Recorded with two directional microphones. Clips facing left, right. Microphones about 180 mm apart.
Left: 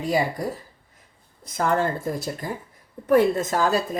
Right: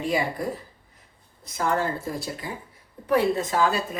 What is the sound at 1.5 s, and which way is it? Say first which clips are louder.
A man's voice: left 3 dB; 50° left (ahead or behind).